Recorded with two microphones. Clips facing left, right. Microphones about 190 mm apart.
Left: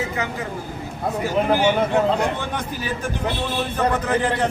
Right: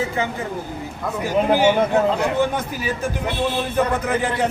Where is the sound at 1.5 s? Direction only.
10° right (ahead or behind).